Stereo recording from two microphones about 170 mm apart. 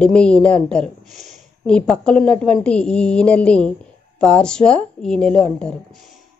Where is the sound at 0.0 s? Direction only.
5° left (ahead or behind).